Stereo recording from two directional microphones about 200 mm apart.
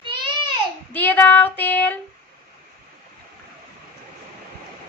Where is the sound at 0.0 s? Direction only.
25° right (ahead or behind).